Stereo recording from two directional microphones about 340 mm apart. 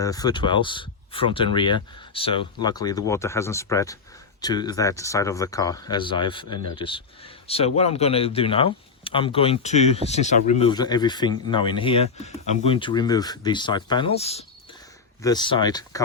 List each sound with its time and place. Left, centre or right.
0.0 s speech: centre